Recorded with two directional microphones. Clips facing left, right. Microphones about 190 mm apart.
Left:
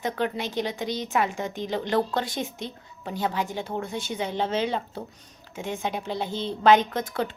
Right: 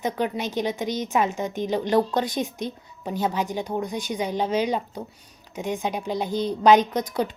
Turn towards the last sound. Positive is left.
turn(degrees=-15)  # may be behind; listen again after turning